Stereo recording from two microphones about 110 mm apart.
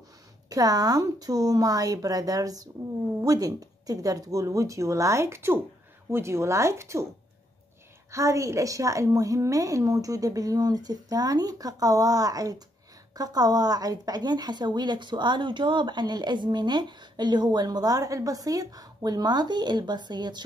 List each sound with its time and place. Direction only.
0.5 s speech: 35° right (ahead or behind)
8.1 s speech: 30° right (ahead or behind)